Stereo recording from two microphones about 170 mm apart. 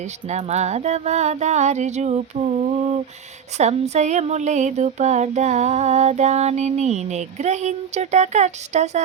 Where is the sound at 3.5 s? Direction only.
40° right (ahead or behind).